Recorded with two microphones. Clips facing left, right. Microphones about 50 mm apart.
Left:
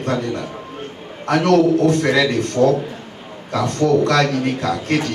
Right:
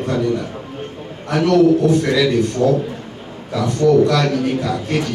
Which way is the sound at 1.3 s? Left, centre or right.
Left.